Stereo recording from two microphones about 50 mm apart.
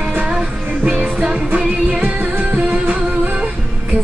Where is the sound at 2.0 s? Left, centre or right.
Right.